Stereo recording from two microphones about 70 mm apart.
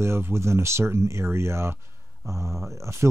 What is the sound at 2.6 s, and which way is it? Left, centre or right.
Speech, centre.